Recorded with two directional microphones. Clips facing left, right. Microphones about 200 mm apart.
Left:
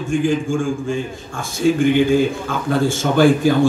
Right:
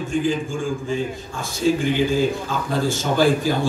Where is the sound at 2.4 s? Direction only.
55° left (ahead or behind).